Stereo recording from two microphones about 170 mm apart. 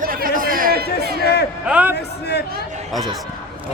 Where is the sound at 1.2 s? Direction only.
70° left (ahead or behind).